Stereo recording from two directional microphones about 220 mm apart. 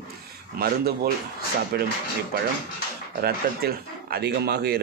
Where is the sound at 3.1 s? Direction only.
45° right (ahead or behind).